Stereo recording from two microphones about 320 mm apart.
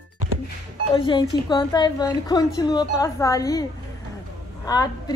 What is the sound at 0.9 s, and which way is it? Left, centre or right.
A woman's voice, centre.